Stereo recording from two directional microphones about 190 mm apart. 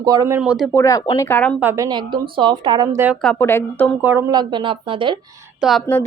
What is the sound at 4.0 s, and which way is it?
A woman's voice, 10° right (ahead or behind).